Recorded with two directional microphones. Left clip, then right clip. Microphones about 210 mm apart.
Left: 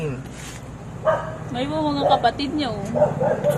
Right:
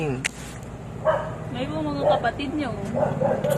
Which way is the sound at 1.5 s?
35° left (ahead or behind).